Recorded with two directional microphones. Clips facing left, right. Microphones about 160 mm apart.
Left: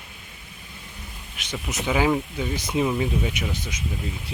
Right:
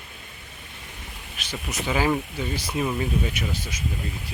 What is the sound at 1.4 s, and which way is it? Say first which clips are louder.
Speech: left 2 dB; 20° left (ahead or behind).